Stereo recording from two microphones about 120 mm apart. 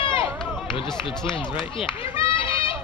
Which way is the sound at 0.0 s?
45° left (ahead or behind).